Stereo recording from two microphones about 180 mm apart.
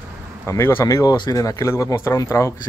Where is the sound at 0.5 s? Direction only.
15° left (ahead or behind).